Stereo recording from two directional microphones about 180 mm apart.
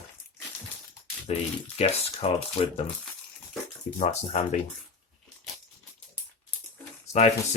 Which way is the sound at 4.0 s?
40° left (ahead or behind).